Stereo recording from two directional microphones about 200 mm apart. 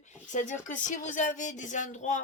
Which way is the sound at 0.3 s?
35° left (ahead or behind).